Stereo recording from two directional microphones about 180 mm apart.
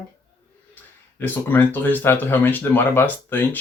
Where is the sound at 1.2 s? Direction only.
10° left (ahead or behind).